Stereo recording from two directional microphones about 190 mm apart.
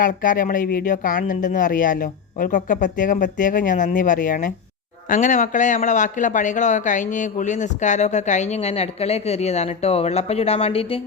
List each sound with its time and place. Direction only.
0.0 s a man's voice: 45° left (ahead or behind)